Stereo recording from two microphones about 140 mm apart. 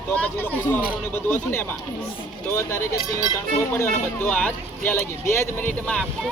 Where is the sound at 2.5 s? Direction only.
20° left (ahead or behind).